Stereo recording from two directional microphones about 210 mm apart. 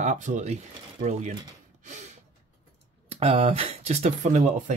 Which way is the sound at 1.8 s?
35° right (ahead or behind).